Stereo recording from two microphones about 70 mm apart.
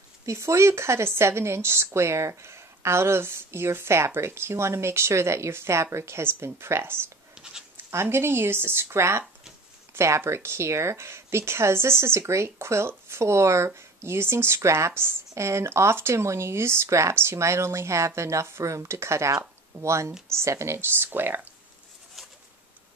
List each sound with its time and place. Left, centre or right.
0.2 s speech: right